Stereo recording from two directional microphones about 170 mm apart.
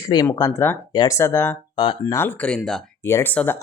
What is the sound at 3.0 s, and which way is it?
Speech, 15° left (ahead or behind).